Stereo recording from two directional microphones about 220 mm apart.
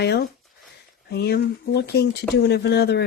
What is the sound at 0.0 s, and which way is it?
Speech, 50° left (ahead or behind).